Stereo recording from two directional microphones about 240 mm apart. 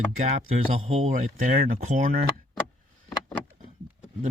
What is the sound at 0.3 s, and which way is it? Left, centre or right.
Speech, right.